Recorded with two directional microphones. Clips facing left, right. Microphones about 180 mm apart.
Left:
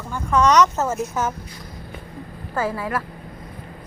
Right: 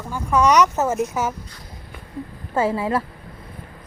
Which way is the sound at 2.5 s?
25° right (ahead or behind).